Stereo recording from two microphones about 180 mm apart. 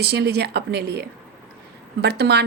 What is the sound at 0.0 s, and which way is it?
A woman's voice, 65° right (ahead or behind).